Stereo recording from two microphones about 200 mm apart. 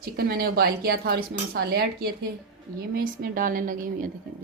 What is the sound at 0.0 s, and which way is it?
Speech, 50° right (ahead or behind).